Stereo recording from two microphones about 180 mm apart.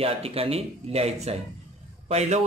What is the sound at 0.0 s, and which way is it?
A man's voice, 35° right (ahead or behind).